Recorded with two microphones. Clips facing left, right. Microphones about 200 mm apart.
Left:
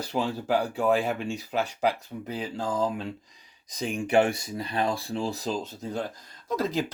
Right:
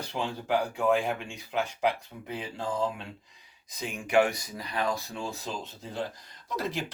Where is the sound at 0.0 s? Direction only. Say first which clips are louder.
Left 5 dB; 40° left (ahead or behind).